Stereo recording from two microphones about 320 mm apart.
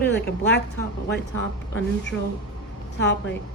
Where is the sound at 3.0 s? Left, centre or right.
Left.